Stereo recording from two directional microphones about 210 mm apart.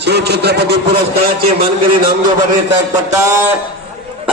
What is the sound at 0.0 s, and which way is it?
Speech, 55° right (ahead or behind).